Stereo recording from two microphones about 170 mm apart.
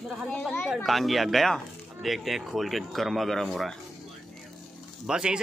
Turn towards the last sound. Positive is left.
turn(degrees=-5)  # may be behind; listen again after turning